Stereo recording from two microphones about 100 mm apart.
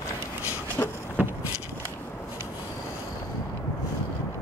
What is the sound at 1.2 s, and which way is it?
Vehicle, 15° right (ahead or behind).